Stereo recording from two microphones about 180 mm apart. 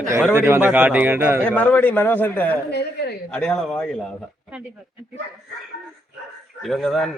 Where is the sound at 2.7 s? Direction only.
65° left (ahead or behind).